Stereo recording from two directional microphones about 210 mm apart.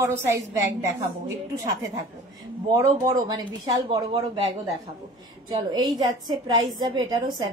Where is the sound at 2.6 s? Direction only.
15° right (ahead or behind).